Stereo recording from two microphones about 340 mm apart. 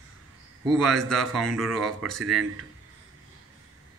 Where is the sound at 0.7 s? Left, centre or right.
Centre.